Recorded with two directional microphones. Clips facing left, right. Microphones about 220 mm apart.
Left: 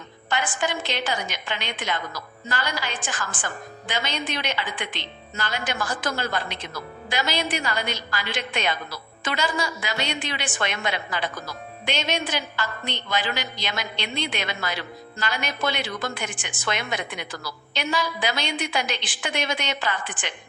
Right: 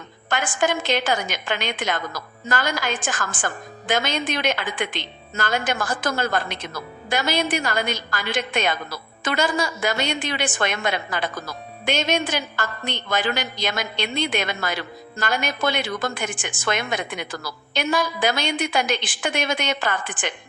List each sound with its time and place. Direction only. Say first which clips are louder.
0.3 s a woman's voice: right 4 dB; 50° right (ahead or behind)